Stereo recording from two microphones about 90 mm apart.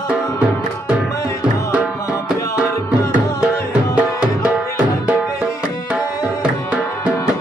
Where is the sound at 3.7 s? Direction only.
15° right (ahead or behind).